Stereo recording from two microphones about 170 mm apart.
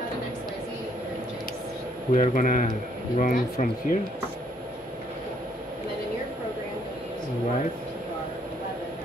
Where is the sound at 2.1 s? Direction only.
50° left (ahead or behind).